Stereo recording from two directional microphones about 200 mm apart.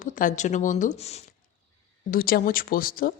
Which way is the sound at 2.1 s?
45° left (ahead or behind).